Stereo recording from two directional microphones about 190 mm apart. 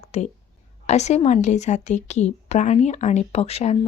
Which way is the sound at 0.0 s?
35° left (ahead or behind).